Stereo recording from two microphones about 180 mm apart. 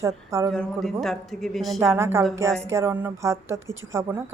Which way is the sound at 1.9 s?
15° right (ahead or behind).